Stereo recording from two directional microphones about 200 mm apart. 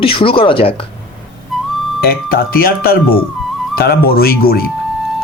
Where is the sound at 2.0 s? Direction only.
50° left (ahead or behind).